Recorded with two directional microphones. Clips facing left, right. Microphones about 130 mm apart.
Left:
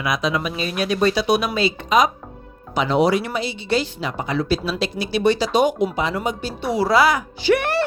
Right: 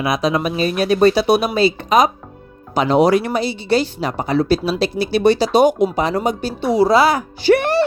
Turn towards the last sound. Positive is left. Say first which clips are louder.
# right 4 dB
turn(degrees=-35)  # may be behind; listen again after turning